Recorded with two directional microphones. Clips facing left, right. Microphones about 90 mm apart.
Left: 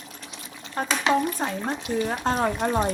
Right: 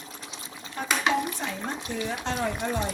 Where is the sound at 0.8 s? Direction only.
45° left (ahead or behind).